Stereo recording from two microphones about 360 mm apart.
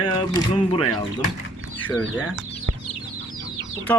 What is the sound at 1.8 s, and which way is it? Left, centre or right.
Speech, centre.